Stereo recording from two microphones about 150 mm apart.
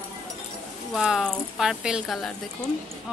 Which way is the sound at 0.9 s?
5° right (ahead or behind).